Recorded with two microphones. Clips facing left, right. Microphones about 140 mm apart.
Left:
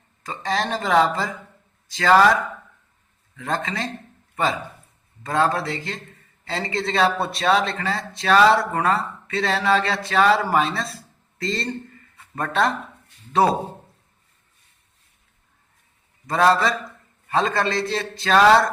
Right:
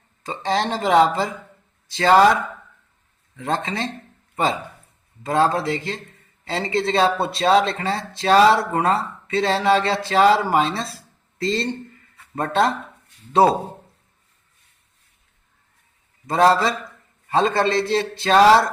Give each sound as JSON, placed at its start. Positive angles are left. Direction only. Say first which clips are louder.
{"t": 0.2, "sound": "a man's voice", "louder": "right 3 dB", "side_deg": -25}
{"t": 5.2, "sound": "a man's voice", "louder": "right 2 dB", "side_deg": -25}
{"t": 16.2, "sound": "a man's voice", "louder": "right 2 dB", "side_deg": -30}